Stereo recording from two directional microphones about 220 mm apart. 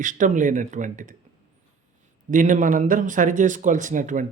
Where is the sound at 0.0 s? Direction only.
35° right (ahead or behind).